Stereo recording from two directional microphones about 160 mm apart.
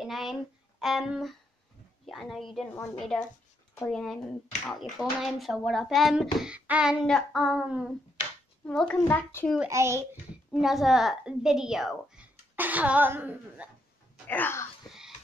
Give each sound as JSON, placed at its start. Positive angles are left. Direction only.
{"t": 0.0, "sound": "a child's voice", "side_deg": 0}
{"t": 9.7, "sound": "speech", "side_deg": -20}
{"t": 10.5, "sound": "speech", "side_deg": 0}
{"t": 14.2, "sound": "wail", "side_deg": 10}
{"t": 14.9, "sound": "a sound", "side_deg": 0}